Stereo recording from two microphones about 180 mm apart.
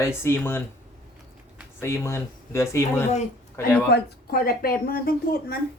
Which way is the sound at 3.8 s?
60° left (ahead or behind).